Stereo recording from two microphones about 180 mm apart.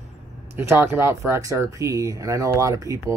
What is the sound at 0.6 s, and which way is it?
Speech, 15° right (ahead or behind).